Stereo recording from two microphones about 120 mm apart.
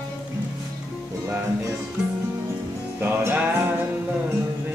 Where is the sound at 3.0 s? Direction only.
15° right (ahead or behind).